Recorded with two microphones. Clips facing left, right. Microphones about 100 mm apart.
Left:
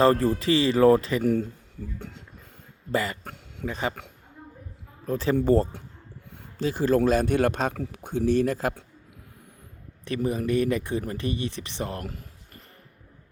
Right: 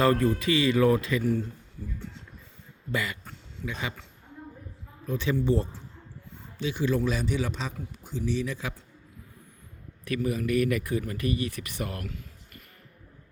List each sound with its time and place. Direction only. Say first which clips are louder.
0.0 s speech: left 3 dB; 35° left (ahead or behind)
1.2 s speech: left 4 dB; 55° left (ahead or behind)
2.0 s a sound: left 1 dB; 50° left (ahead or behind)
2.9 s speech: left 4 dB; 35° left (ahead or behind)
5.0 s speech: left 4 dB; 40° left (ahead or behind)
5.4 s speech: left 5 dB; 50° left (ahead or behind)
10.2 s speech: left 2 dB; 25° left (ahead or behind)